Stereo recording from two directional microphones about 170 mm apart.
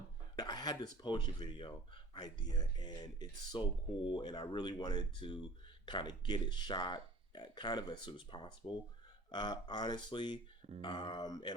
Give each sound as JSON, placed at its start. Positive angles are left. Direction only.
{"t": 0.3, "sound": "speech", "side_deg": 25}